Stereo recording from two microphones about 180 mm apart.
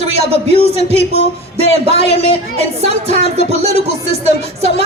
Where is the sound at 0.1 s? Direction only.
35° right (ahead or behind).